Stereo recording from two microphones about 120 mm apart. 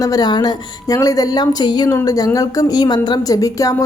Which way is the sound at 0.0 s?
30° left (ahead or behind).